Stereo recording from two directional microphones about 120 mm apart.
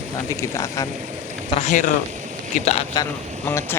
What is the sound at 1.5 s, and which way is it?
Speech, 75° left (ahead or behind).